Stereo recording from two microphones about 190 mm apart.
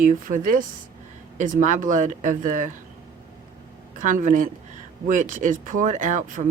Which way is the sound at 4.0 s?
45° right (ahead or behind).